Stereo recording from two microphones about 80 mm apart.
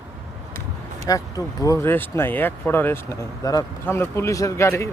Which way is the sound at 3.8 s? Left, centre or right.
Left.